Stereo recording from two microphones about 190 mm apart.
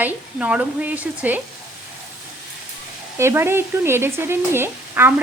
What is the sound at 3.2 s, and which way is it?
Speech, 15° right (ahead or behind).